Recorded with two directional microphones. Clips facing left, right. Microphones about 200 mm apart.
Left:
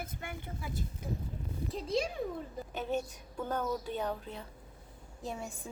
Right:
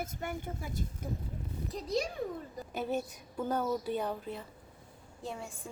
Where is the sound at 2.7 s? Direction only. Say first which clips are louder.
Right 1 dB; 5° right (ahead or behind).